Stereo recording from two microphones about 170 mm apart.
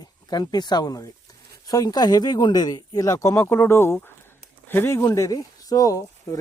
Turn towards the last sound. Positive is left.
turn(degrees=20)  # may be behind; listen again after turning